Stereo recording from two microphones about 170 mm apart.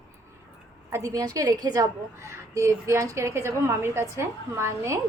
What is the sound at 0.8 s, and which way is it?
A woman's voice, 15° right (ahead or behind).